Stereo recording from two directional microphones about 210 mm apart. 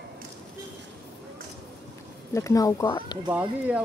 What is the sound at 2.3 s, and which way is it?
Speech, 15° left (ahead or behind).